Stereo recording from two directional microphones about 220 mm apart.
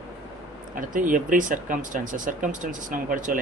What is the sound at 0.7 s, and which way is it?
Speech, 35° right (ahead or behind).